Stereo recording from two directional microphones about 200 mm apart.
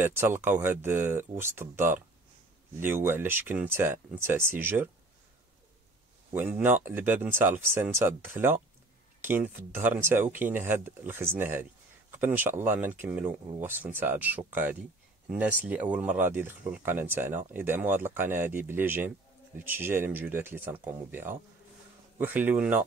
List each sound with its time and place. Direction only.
0.0 s speech: 10° right (ahead or behind)
6.3 s speech: 10° right (ahead or behind)